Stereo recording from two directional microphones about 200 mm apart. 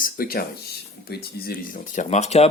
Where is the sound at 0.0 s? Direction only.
45° left (ahead or behind).